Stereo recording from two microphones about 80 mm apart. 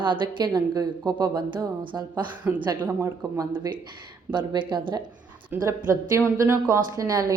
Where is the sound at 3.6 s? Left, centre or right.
Right.